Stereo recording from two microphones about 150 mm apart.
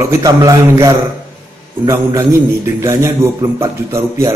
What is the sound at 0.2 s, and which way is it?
A man's voice, 20° right (ahead or behind).